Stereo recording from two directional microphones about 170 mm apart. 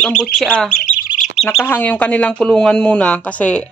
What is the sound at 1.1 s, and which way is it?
Bird, 45° left (ahead or behind).